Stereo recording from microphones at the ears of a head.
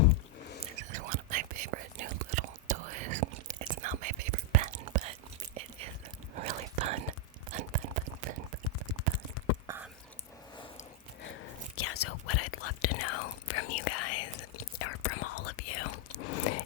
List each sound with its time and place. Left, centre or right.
0.0 s a sound: left
0.6 s whispering: right
6.3 s whispering: right
11.2 s whispering: left